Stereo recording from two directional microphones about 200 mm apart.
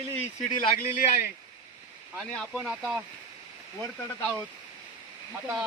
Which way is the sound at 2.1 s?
5° right (ahead or behind).